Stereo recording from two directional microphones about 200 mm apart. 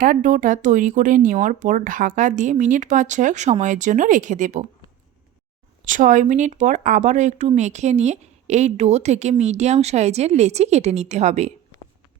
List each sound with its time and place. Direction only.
0.0 s speech: 40° right (ahead or behind)
5.8 s speech: 40° right (ahead or behind)